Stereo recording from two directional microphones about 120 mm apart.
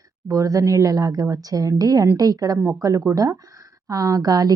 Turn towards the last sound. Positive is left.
turn(degrees=-30)  # may be behind; listen again after turning